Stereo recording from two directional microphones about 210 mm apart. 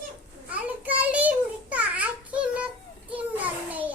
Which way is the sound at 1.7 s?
5° right (ahead or behind).